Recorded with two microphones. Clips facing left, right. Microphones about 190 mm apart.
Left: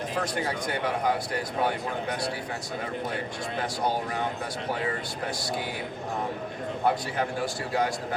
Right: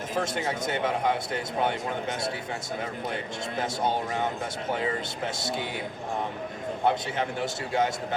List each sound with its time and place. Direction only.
0.3 s a man's voice: 25° right (ahead or behind)
4.7 s a man's voice: 25° right (ahead or behind)
6.8 s a man's voice: 25° right (ahead or behind)